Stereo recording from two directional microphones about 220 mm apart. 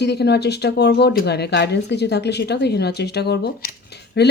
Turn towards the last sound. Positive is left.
turn(degrees=45)  # may be behind; listen again after turning